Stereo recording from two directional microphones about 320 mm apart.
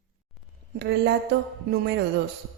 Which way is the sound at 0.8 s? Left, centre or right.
Right.